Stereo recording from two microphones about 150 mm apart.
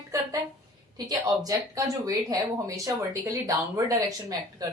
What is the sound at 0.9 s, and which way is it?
Speech, 25° right (ahead or behind).